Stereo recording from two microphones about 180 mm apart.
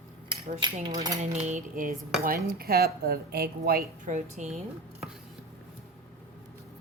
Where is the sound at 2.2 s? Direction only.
55° right (ahead or behind).